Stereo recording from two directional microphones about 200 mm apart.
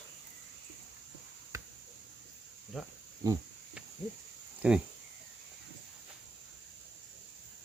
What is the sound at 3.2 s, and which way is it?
Speech, 15° right (ahead or behind).